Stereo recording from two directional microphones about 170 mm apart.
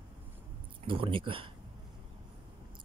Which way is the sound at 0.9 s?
30° right (ahead or behind).